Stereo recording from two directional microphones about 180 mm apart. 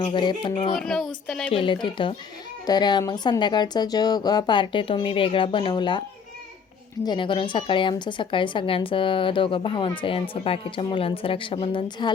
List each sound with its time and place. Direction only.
0.0 s a woman's voice: 25° left (ahead or behind)
0.8 s speech: 5° left (ahead or behind)
1.5 s a woman's voice: 30° left (ahead or behind)
7.0 s a woman's voice: 25° left (ahead or behind)